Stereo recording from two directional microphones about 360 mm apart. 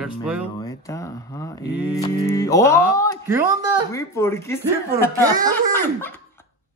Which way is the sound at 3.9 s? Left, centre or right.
Centre.